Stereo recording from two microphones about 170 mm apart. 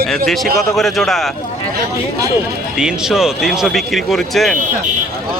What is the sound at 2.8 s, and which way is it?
Speech, 5° right (ahead or behind).